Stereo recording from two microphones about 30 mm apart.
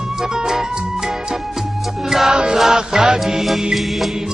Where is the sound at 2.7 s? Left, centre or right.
Right.